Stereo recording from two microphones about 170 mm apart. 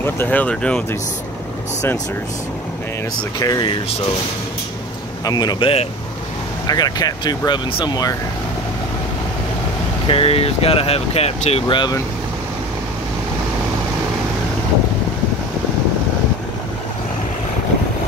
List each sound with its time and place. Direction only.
0.0 s speech: 10° left (ahead or behind)
3.3 s speech: 20° left (ahead or behind)
5.2 s speech: 25° left (ahead or behind)
10.0 s speech: 35° left (ahead or behind)
11.6 s speech: 25° left (ahead or behind)